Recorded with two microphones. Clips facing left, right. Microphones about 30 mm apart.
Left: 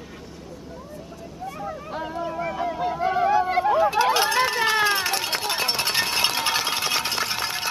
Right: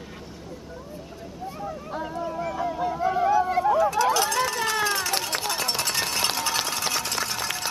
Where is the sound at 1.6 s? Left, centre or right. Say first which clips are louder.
Left 1 dB; centre.